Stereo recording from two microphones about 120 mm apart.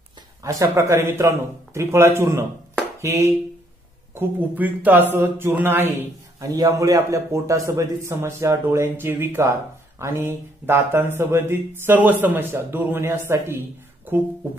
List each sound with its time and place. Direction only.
0.4 s speech: 25° right (ahead or behind)
3.0 s a sound: 25° right (ahead or behind)
4.1 s speech: 15° right (ahead or behind)
6.4 s speech: 30° right (ahead or behind)